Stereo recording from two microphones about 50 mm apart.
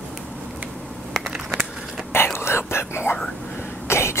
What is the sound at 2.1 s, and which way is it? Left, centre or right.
Whispering, left.